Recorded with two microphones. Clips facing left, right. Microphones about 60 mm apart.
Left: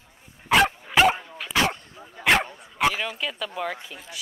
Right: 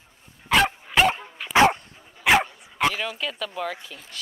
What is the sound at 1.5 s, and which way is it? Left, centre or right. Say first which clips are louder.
Dog: right 7 dB; right.